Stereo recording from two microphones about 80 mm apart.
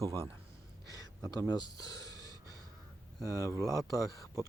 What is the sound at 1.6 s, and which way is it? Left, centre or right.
Speech, left.